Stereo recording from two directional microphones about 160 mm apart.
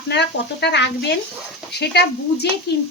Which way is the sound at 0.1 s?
90° left.